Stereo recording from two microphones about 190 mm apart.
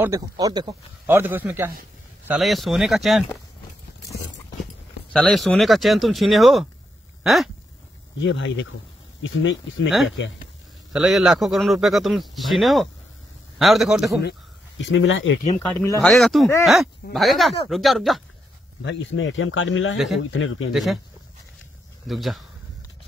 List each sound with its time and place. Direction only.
0.0 s speech: 15° right (ahead or behind); by 3.3 s centre (ahead or behind)
5.1 s speech: 5° left (ahead or behind)
8.2 s speech: 75° left (ahead or behind)
9.2 s speech: 90° left
10.0 s speech: 75° left (ahead or behind)
10.9 s speech: centre (ahead or behind)
14.8 s speech: 90° left
15.6 s speech: 10° left (ahead or behind)
18.8 s speech: 75° left (ahead or behind); by 20.7 s 90° left
20.7 s speech: centre (ahead or behind)
22.0 s speech: centre (ahead or behind)